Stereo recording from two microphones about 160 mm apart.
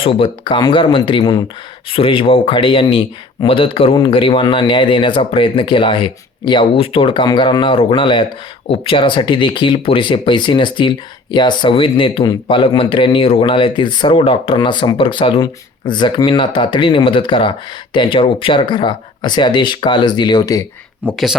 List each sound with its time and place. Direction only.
0.0 s speech: 35° left (ahead or behind)
21.0 s speech: 10° right (ahead or behind)